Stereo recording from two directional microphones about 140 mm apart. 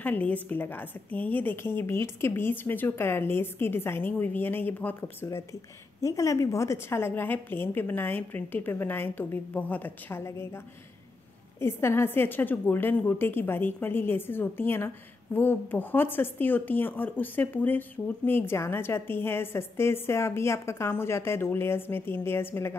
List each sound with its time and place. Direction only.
0.0 s a woman's voice: 10° left (ahead or behind)
11.6 s a woman's voice: 20° left (ahead or behind)